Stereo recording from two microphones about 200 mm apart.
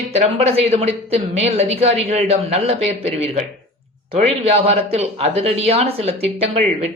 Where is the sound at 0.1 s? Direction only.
35° right (ahead or behind).